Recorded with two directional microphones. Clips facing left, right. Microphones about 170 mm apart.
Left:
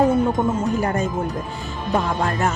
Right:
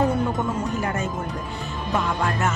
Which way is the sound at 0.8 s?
35° left (ahead or behind).